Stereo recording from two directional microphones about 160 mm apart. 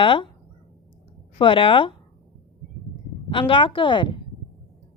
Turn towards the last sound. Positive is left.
turn(degrees=30)  # may be behind; listen again after turning